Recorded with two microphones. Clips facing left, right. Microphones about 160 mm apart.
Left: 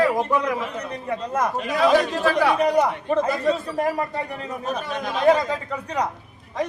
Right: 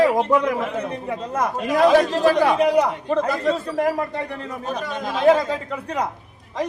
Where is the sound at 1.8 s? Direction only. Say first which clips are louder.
Right 3 dB; 45° right (ahead or behind).